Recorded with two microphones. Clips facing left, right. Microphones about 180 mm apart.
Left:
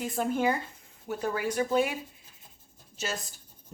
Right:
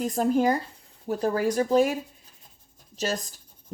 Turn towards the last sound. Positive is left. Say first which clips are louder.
# right 6 dB
turn(degrees=-40)  # may be behind; listen again after turning